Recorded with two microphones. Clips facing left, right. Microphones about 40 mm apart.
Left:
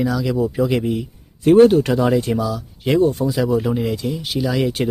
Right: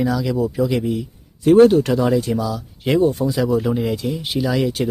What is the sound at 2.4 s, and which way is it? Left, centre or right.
Speech, centre.